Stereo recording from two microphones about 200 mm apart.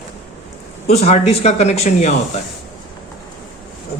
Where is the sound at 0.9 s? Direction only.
30° left (ahead or behind).